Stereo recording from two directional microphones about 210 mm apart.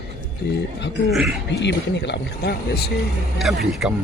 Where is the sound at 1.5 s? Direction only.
55° left (ahead or behind).